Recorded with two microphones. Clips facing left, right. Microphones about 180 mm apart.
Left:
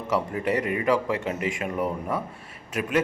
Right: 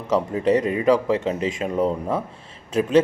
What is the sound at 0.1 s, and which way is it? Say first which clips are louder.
Speech: right 6 dB; 20° right (ahead or behind).